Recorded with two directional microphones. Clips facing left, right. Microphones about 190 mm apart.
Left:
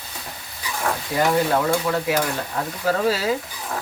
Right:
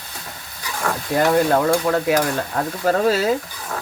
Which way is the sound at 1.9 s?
45° right (ahead or behind).